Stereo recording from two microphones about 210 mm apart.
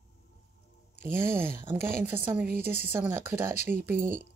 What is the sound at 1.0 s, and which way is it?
Speech, 10° right (ahead or behind).